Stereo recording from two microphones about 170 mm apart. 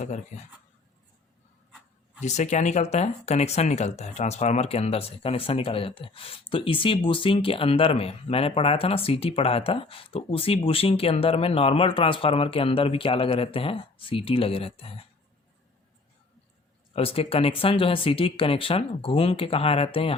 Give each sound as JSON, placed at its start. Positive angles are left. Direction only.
{"t": 2.2, "sound": "speech", "side_deg": 45}
{"t": 16.9, "sound": "speech", "side_deg": 35}